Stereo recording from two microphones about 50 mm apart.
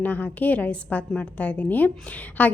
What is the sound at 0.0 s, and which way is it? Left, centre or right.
A woman's voice, left.